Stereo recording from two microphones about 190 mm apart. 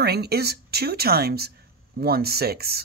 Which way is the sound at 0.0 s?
60° right (ahead or behind).